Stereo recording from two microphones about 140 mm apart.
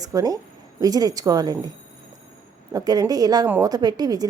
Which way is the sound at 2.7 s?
25° right (ahead or behind).